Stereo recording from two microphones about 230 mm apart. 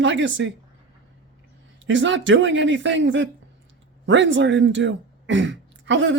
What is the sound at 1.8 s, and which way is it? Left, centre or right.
Speech, right.